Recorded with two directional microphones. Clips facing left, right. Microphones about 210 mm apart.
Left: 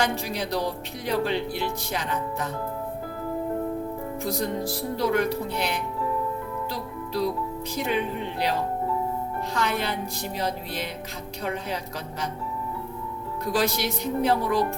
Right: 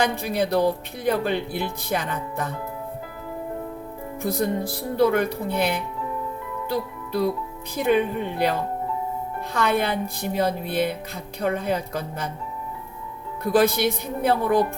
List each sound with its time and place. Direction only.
0.0 s speech: 55° right (ahead or behind)
4.2 s speech: 55° right (ahead or behind)
9.6 s speech: 55° right (ahead or behind)
13.4 s speech: 55° right (ahead or behind)